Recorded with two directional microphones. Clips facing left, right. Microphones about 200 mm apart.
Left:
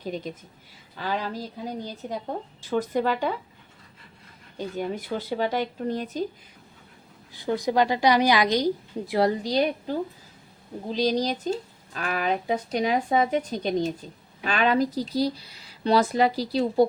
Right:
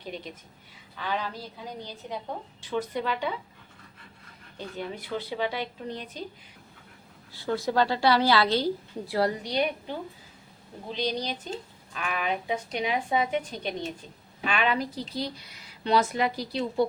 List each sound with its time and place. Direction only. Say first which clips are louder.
0.0 s a woman's voice: left 6 dB; 40° left (ahead or behind)
4.5 s speech: left 6 dB; 45° left (ahead or behind)
7.3 s a woman's voice: left 3 dB; 15° left (ahead or behind)
9.4 s speech: left 4 dB; 35° left (ahead or behind)